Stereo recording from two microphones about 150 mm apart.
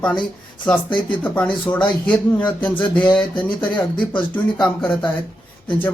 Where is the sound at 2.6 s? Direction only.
10° left (ahead or behind).